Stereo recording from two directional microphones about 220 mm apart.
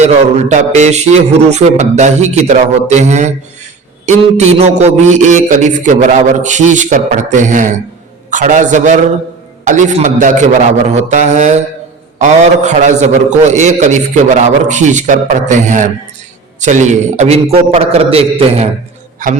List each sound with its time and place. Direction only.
0.0 s a man's voice: 30° right (ahead or behind)